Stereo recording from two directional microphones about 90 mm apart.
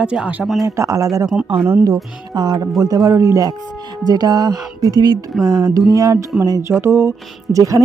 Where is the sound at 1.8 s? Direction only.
45° right (ahead or behind).